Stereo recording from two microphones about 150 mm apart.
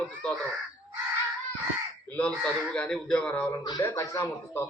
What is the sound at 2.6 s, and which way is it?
Speech, 5° left (ahead or behind).